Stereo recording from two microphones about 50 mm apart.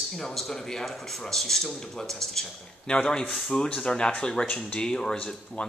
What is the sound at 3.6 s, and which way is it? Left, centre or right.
A man's voice, centre.